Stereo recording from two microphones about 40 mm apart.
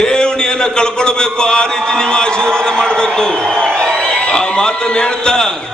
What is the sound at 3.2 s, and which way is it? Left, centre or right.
A man's voice, centre.